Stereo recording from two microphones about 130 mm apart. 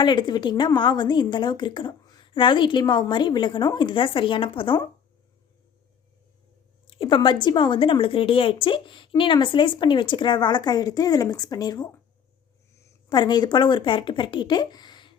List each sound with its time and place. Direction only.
0.0 s speech: 35° left (ahead or behind)
6.8 s speech: 40° left (ahead or behind)
13.1 s speech: 35° left (ahead or behind)